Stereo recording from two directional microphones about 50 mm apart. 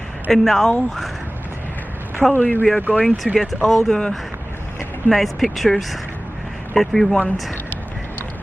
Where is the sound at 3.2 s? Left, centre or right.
Centre.